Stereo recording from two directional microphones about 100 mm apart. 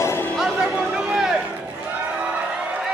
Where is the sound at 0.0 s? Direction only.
25° left (ahead or behind).